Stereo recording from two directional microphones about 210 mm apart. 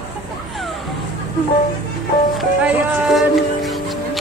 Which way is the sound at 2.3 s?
Centre (ahead or behind).